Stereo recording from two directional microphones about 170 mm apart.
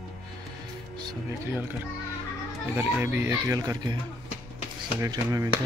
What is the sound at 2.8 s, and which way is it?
Speech, 10° right (ahead or behind).